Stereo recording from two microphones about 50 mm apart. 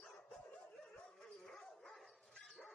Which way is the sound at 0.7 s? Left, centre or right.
Centre.